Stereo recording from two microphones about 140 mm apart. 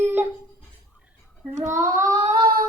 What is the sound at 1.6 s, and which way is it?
Child singing, 20° right (ahead or behind).